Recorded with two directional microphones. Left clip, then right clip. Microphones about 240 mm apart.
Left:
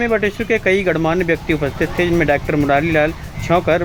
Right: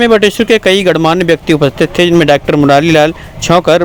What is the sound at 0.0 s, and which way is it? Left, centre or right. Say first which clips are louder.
Speech: right 10 dB; right.